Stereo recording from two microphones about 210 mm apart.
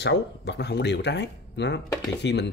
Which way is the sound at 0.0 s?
55° left (ahead or behind).